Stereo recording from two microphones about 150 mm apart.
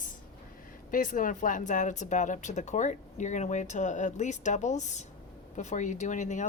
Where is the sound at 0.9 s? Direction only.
60° left (ahead or behind).